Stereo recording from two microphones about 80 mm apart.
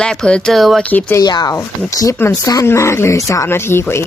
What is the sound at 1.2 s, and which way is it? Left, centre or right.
Speech, left.